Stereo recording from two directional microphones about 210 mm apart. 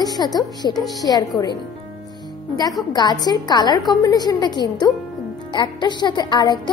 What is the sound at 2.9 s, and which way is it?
Music, 20° left (ahead or behind).